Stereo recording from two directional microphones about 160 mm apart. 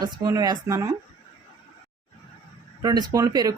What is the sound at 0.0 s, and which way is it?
Speech, 25° right (ahead or behind).